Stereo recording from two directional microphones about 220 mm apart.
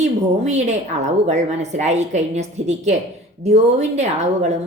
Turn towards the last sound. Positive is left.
turn(degrees=-30)  # may be behind; listen again after turning